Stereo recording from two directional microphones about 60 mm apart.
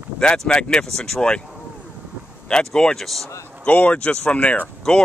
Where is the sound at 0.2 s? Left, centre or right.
Centre.